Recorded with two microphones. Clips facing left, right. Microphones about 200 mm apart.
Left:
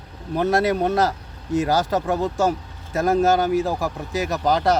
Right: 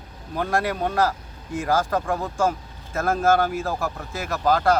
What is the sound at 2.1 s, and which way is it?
Speech, 20° left (ahead or behind).